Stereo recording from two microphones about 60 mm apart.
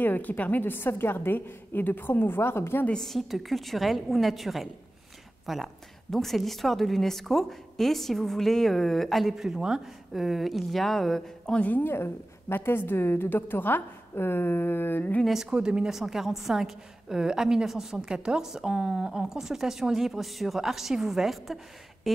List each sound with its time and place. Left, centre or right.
0.0 s a woman's voice: left
2.9 s a woman's voice: centre
11.6 s a woman's voice: left
15.5 s a woman's voice: centre
22.1 s a sound: centre